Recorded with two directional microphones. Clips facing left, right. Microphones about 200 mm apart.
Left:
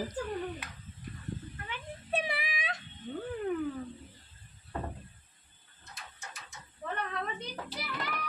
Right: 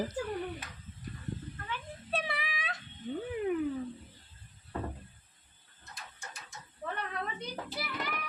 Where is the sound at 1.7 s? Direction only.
15° left (ahead or behind).